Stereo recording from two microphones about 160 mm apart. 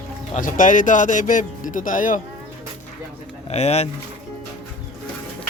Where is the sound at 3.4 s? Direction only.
40° left (ahead or behind).